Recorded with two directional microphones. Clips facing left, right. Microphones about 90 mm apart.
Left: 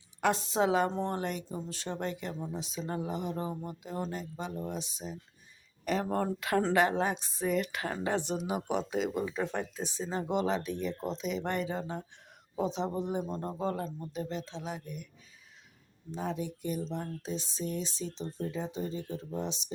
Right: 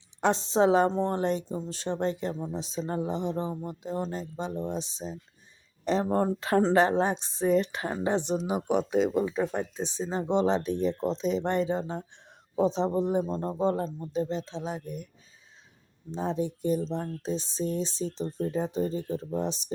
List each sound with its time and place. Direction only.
0.2 s speech: 25° right (ahead or behind)
9.3 s speech: 15° right (ahead or behind); by 15.1 s 40° right (ahead or behind)
16.1 s speech: 30° right (ahead or behind)